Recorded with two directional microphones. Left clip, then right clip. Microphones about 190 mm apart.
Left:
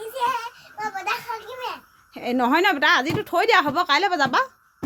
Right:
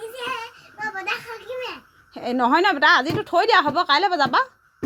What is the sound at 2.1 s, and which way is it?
A woman's voice, 5° left (ahead or behind).